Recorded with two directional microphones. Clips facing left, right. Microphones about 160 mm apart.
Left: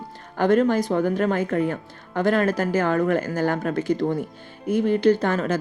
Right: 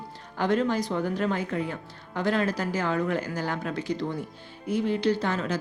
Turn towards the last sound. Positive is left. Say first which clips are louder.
# left 6 dB
turn(degrees=50)  # may be behind; listen again after turning